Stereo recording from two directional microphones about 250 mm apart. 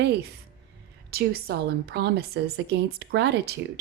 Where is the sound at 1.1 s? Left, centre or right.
Right.